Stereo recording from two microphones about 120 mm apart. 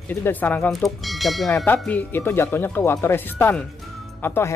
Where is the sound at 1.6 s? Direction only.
15° left (ahead or behind).